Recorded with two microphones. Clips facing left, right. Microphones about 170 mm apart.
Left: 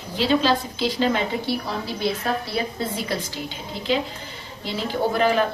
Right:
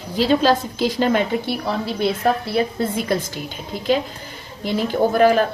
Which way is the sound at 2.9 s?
50° right (ahead or behind).